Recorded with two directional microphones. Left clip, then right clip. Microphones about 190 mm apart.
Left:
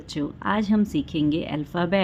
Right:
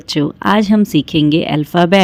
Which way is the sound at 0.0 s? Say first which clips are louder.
Right 12 dB; 45° right (ahead or behind).